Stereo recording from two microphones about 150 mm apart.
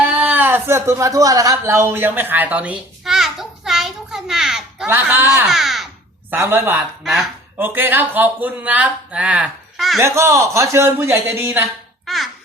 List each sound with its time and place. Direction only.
0.0 s a sound: 10° right (ahead or behind)
4.9 s speech: 15° right (ahead or behind)
5.5 s crow: centre (ahead or behind)
6.3 s speech: 15° right (ahead or behind)
7.0 s speech: centre (ahead or behind)
7.6 s speech: 15° right (ahead or behind)
10.0 s a man's voice: 20° right (ahead or behind)
12.0 s a child's voice: centre (ahead or behind)